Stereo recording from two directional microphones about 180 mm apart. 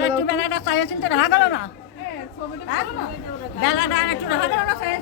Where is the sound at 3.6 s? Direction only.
80° left.